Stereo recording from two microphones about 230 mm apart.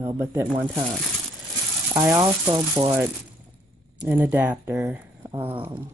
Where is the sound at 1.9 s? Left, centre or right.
Centre.